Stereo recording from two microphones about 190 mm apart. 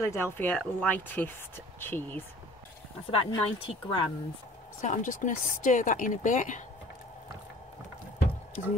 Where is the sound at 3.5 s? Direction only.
25° left (ahead or behind).